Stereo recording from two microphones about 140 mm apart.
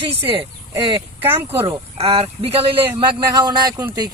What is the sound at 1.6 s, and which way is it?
A man's voice, 40° right (ahead or behind).